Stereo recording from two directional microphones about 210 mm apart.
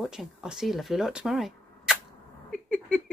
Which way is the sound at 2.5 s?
5° left (ahead or behind).